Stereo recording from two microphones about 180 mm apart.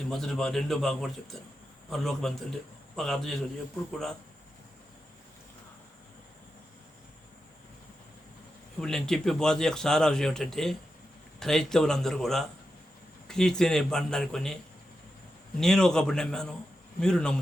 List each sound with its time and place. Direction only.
0.1 s speech: centre (ahead or behind)
8.8 s speech: 5° left (ahead or behind)
15.6 s speech: 5° left (ahead or behind)